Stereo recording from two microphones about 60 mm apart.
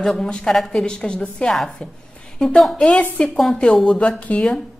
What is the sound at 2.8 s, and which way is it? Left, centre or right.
A woman's voice, centre.